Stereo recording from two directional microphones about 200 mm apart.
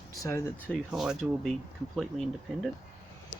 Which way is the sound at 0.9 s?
Centre (ahead or behind).